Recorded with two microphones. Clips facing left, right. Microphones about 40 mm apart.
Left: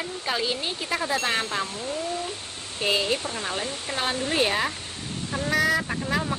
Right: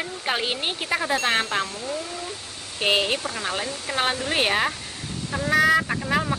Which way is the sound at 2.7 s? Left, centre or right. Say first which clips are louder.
Right 2 dB; right.